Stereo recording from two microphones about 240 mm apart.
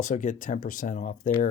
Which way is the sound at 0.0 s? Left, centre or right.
Left.